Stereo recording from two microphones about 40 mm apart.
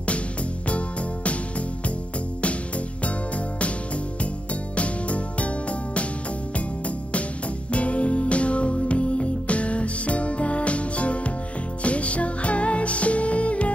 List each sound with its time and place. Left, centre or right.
0.0 s music: left
3.5 s music: left
7.7 s music: left